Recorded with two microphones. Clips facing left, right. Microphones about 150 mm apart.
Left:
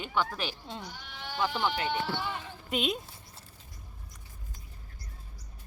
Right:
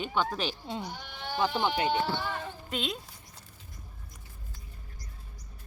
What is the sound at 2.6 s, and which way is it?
Speech, 15° left (ahead or behind).